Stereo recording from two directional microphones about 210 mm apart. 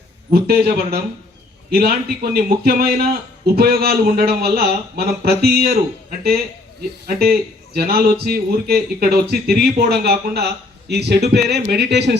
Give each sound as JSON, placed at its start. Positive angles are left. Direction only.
{"t": 0.3, "sound": "speech", "side_deg": -45}